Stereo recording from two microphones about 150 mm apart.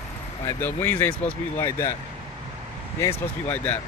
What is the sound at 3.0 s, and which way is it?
Speech, 10° left (ahead or behind).